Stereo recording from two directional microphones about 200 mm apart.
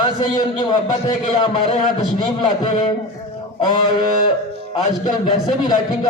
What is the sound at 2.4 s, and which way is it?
Speech, 25° left (ahead or behind).